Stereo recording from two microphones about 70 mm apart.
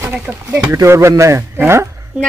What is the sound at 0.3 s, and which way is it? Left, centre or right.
Speech, centre.